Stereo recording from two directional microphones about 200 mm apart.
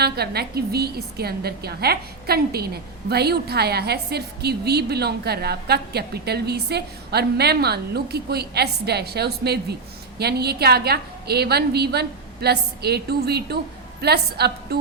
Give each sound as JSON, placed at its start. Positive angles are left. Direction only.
{"t": 0.0, "sound": "a woman's voice", "side_deg": -55}